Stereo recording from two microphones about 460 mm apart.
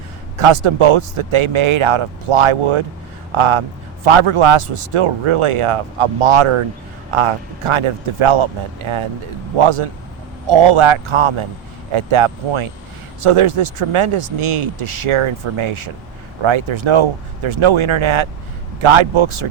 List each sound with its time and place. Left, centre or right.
0.3 s speech: right